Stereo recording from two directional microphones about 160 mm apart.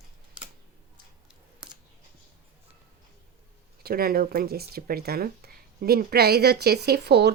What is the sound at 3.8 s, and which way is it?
A woman's voice, 70° right (ahead or behind).